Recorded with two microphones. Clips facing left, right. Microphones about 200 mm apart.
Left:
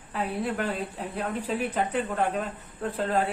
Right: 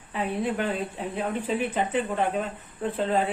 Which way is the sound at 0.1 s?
Centre (ahead or behind).